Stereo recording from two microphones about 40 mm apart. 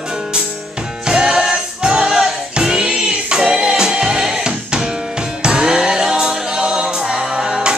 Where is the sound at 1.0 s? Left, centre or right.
Right.